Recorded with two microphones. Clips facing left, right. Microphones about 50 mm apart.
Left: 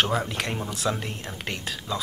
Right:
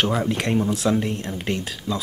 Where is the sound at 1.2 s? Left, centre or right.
Centre.